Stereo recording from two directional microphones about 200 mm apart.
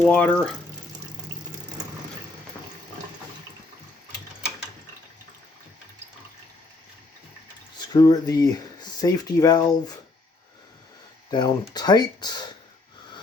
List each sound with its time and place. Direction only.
0.0 s speech: 5° left (ahead or behind)
7.8 s speech: 20° left (ahead or behind)
11.3 s speech: 20° left (ahead or behind)